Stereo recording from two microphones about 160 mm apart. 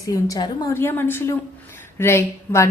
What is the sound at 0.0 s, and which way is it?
A woman's voice, 20° left (ahead or behind).